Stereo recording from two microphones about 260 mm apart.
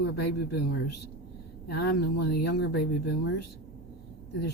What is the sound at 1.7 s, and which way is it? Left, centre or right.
Speech, left.